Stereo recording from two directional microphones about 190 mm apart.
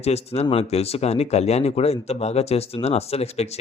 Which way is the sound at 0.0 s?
35° left (ahead or behind).